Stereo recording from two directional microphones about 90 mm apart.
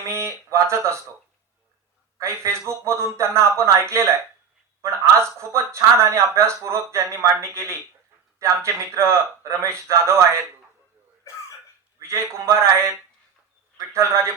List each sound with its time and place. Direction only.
0.1 s speech: 30° right (ahead or behind)
2.1 s a man's voice: 35° right (ahead or behind)
11.9 s a man's voice: 35° right (ahead or behind)